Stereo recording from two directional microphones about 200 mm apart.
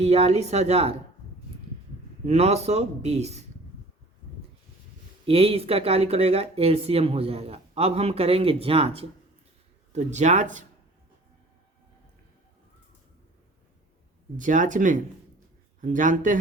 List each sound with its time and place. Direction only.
0.0 s a man's voice: 30° right (ahead or behind)
2.2 s a man's voice: 30° right (ahead or behind)
5.2 s a man's voice: 30° right (ahead or behind)
14.3 s a man's voice: 40° right (ahead or behind)